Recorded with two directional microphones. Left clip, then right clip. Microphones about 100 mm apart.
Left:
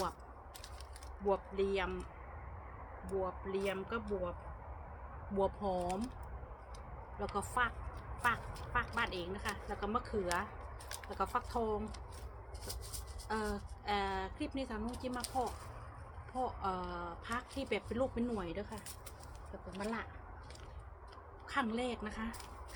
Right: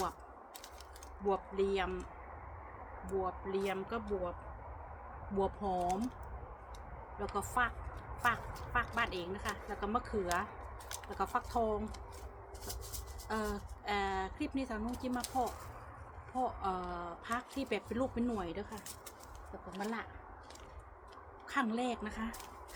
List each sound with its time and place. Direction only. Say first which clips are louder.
1.2 s a woman's voice: right 1 dB; 35° right (ahead or behind)
3.2 s a woman's voice: right 2 dB; 35° right (ahead or behind)
5.3 s a woman's voice: even; 35° right (ahead or behind)
5.8 s speech: right 4 dB; 15° right (ahead or behind)
7.3 s a woman's voice: right 1 dB; 40° right (ahead or behind)
10.8 s a sound: even; 15° right (ahead or behind)
11.3 s a woman's voice: right 4 dB; 40° right (ahead or behind)
13.2 s a woman's voice: right 1 dB; 30° right (ahead or behind)
19.8 s a woman's voice: even; 40° right (ahead or behind)
21.5 s a woman's voice: right 2 dB; 40° right (ahead or behind)